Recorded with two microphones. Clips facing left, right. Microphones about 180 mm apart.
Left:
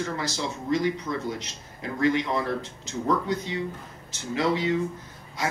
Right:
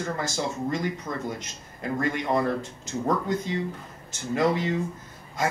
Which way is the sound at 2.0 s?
50° right (ahead or behind).